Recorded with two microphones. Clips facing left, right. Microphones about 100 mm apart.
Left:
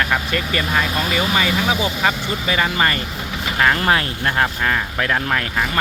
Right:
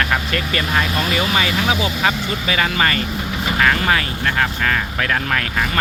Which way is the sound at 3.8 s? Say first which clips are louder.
Left 1 dB; 25° left (ahead or behind).